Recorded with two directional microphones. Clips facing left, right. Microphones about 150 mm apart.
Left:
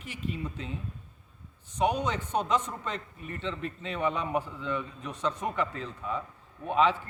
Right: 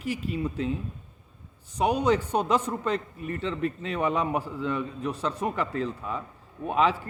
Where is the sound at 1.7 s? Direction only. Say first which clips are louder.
Right 5 dB; 35° right (ahead or behind).